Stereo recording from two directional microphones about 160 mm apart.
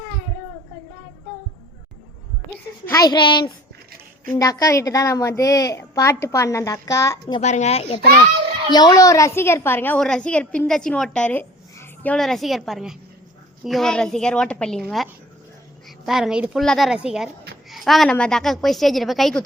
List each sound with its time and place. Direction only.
2.9 s a woman's voice: 25° left (ahead or behind)
7.4 s speech: 45° left (ahead or behind)
8.7 s a woman's voice: 25° left (ahead or behind); by 19.4 s centre (ahead or behind)